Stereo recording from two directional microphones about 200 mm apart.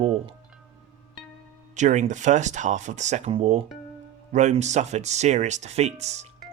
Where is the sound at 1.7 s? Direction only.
35° right (ahead or behind).